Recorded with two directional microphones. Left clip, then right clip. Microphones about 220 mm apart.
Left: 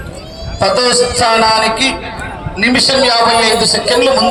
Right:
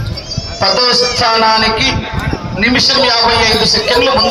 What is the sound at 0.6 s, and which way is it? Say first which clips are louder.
Music: even; 55° left (ahead or behind).